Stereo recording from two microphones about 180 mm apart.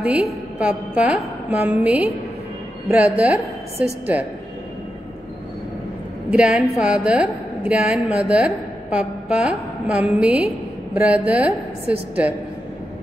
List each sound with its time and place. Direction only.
0.0 s a woman's voice: 5° right (ahead or behind)
6.3 s a woman's voice: 5° right (ahead or behind)